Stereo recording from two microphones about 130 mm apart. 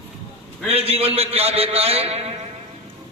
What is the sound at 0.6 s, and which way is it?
A man's voice, 50° right (ahead or behind).